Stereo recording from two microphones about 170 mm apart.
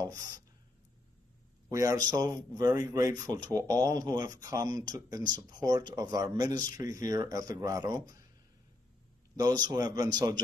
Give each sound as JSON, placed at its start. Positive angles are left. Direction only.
{"t": 1.7, "sound": "speech", "side_deg": -20}
{"t": 9.4, "sound": "speech", "side_deg": -20}